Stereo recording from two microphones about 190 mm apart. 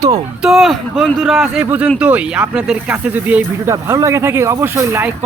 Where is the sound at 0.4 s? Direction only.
Centre (ahead or behind).